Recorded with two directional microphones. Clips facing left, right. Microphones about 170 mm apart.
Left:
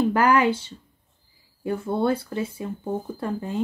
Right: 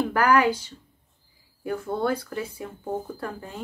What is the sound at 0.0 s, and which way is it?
Speech, 20° left (ahead or behind).